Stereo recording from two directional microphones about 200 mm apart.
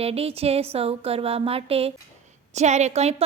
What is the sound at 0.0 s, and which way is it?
A woman's voice, 30° right (ahead or behind).